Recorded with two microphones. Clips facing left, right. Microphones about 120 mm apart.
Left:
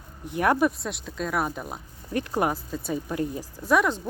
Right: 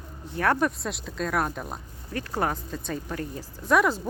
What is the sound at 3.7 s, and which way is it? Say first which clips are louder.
Speech: even; centre (ahead or behind).